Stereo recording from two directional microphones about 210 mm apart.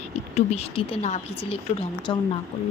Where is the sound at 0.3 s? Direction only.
30° left (ahead or behind).